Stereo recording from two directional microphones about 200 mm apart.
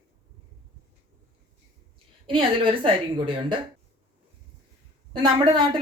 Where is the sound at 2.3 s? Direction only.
25° right (ahead or behind).